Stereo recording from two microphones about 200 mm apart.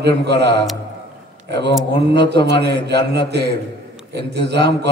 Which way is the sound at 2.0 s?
55° right (ahead or behind).